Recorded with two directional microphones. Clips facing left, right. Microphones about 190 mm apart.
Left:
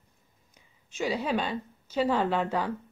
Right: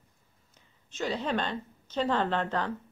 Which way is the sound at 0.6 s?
10° left (ahead or behind).